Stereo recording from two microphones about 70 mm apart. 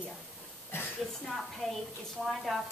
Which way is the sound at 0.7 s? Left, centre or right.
Left.